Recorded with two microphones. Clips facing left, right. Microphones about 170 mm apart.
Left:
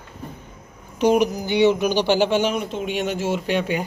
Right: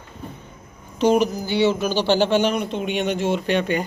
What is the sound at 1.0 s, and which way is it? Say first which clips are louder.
Speech: even; 15° left (ahead or behind).